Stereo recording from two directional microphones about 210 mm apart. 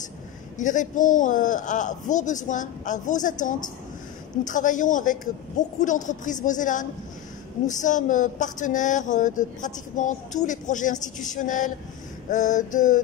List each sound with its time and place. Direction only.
0.6 s speech: 35° left (ahead or behind)